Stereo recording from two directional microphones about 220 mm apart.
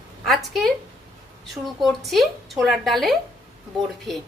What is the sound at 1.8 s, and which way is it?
A woman's voice, centre (ahead or behind).